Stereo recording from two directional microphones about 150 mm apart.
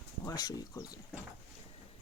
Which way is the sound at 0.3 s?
25° left (ahead or behind).